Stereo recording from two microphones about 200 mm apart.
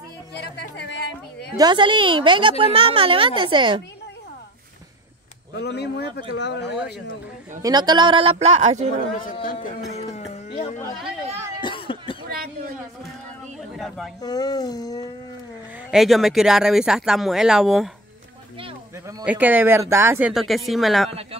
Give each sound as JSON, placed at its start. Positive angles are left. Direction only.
{"t": 0.3, "sound": "a sound", "side_deg": 55}
{"t": 1.6, "sound": "a woman's voice", "side_deg": -20}
{"t": 5.6, "sound": "speech", "side_deg": 55}
{"t": 7.6, "sound": "a woman's voice", "side_deg": -20}
{"t": 9.2, "sound": "a man's voice", "side_deg": 45}
{"t": 10.1, "sound": "a sound", "side_deg": 30}
{"t": 11.6, "sound": "cough", "side_deg": 25}
{"t": 12.3, "sound": "a sound", "side_deg": -45}
{"t": 13.7, "sound": "speech", "side_deg": 0}
{"t": 14.2, "sound": "a sound", "side_deg": 20}
{"t": 15.9, "sound": "speech", "side_deg": 0}
{"t": 19.2, "sound": "speech", "side_deg": -10}
{"t": 21.1, "sound": "a woman's voice", "side_deg": -30}